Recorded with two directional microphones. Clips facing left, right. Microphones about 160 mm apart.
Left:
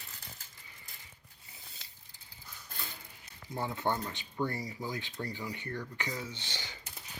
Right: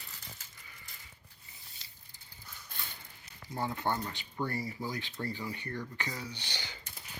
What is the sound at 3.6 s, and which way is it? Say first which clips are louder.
Speech: even; 20° left (ahead or behind).